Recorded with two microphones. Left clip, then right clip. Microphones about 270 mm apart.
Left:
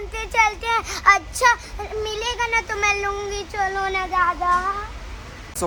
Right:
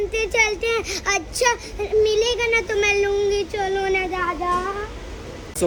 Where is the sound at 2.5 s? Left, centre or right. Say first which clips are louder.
Right 1 dB; left.